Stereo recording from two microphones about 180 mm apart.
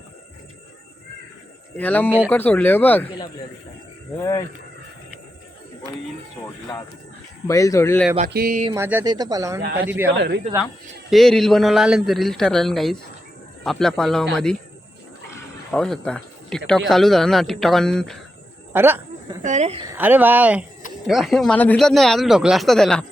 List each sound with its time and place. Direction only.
1.7 s speech: 10° left (ahead or behind)
2.0 s speech: 10° right (ahead or behind)
2.3 s speech: 10° left (ahead or behind)
4.2 s speech: 20° left (ahead or behind)
6.4 s speech: 20° left (ahead or behind)
8.3 s a sound: 55° right (ahead or behind)
8.7 s speech: 10° right (ahead or behind)
10.2 s speech: 70° right (ahead or behind)
11.1 s speech: centre (ahead or behind)
15.7 s speech: 5° left (ahead or behind)
18.7 s a sound: 10° right (ahead or behind)
19.4 s a woman's voice: 40° right (ahead or behind)
20.0 s speech: 10° right (ahead or behind)